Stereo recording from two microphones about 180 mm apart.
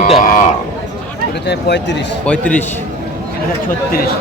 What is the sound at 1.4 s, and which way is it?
Speech, 70° left (ahead or behind).